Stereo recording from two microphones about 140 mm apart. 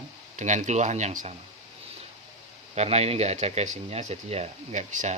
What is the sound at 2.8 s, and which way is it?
Speech, 50° right (ahead or behind).